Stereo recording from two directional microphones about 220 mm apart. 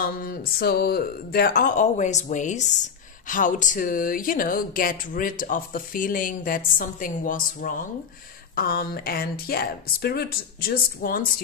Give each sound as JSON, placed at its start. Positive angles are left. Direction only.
{"t": 0.0, "sound": "speech", "side_deg": 40}